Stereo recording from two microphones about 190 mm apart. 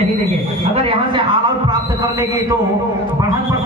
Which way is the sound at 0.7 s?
25° right (ahead or behind).